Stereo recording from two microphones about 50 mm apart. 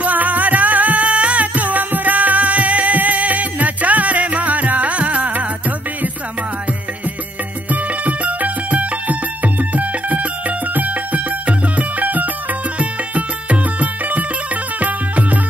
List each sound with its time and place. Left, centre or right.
0.0 s music: right
7.7 s music: right
11.4 s music: right